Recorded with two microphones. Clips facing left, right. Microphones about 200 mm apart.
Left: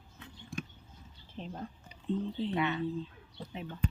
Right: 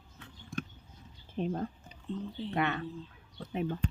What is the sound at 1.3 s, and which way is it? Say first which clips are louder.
Speech: right 8 dB; 60° right (ahead or behind).